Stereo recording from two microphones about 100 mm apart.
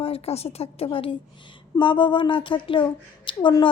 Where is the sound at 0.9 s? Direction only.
60° left (ahead or behind).